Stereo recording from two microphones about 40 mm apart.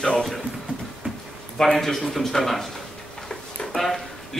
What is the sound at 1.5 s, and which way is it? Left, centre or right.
Speech, centre.